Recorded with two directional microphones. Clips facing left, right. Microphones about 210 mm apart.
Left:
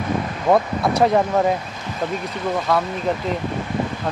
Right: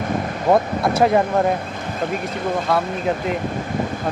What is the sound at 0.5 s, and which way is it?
Speech, centre (ahead or behind).